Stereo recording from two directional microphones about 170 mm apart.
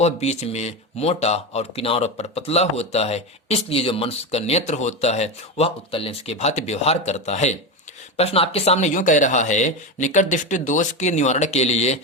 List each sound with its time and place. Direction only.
0.0 s speech: 40° left (ahead or behind)